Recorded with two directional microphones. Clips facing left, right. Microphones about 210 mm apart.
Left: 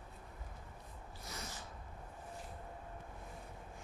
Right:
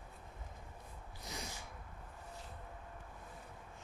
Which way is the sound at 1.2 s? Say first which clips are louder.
Right 2 dB; 15° right (ahead or behind).